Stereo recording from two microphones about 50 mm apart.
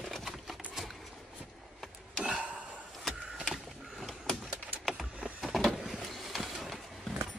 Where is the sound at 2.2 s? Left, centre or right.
Centre.